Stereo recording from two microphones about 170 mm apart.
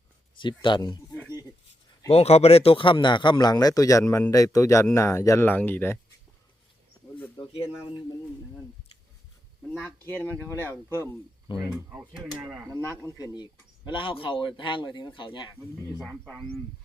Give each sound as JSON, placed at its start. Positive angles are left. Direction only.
{"t": 0.3, "sound": "a man's voice", "side_deg": 30}
{"t": 2.0, "sound": "a man's voice", "side_deg": 35}
{"t": 9.7, "sound": "speech", "side_deg": 5}
{"t": 11.5, "sound": "a man's voice", "side_deg": 30}
{"t": 12.1, "sound": "speech", "side_deg": 0}
{"t": 13.1, "sound": "a man's voice", "side_deg": 20}
{"t": 16.0, "sound": "speech", "side_deg": -5}